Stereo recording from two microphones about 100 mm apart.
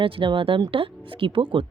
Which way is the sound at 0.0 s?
60° right (ahead or behind).